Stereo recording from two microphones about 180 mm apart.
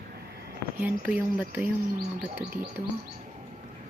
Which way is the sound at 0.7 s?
10° right (ahead or behind).